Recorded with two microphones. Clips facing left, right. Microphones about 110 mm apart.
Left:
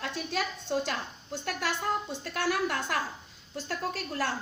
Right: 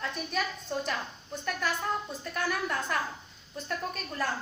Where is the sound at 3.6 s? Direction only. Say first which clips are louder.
Left 1 dB; 85° left.